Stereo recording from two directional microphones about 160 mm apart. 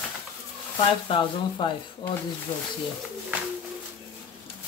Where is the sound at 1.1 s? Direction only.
30° left (ahead or behind).